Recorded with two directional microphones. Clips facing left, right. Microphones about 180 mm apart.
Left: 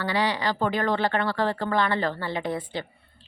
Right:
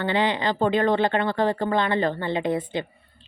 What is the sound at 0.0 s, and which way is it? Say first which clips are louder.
Speech: right 3 dB; 25° right (ahead or behind).